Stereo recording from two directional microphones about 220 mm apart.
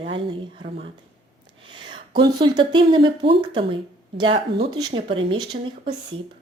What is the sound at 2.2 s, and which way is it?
A woman's voice, 20° right (ahead or behind).